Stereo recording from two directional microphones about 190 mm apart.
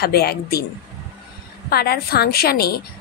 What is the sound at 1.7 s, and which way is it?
A woman's voice, 55° left (ahead or behind).